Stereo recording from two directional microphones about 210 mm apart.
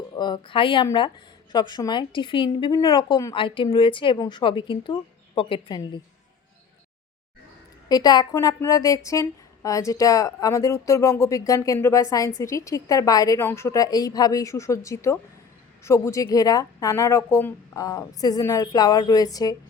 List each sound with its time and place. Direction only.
0.2 s speech: 20° left (ahead or behind)
7.9 s speech: 20° left (ahead or behind)